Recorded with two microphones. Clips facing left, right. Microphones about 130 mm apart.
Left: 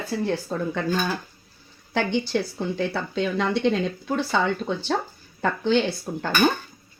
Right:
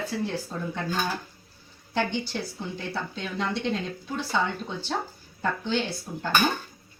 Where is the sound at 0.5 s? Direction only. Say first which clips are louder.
Left 6 dB; 60° left (ahead or behind).